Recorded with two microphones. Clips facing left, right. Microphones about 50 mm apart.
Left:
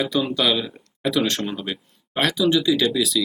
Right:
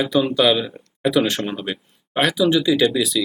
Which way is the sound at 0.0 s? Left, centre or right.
Centre.